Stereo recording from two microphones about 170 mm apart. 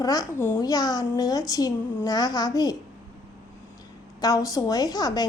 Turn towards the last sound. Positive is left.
turn(degrees=25)  # may be behind; listen again after turning